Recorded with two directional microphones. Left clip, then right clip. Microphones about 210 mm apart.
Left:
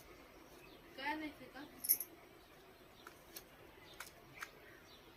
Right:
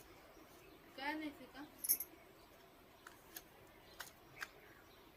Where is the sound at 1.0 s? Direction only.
40° right (ahead or behind).